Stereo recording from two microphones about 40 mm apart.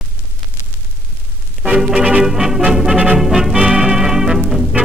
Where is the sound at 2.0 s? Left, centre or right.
Centre.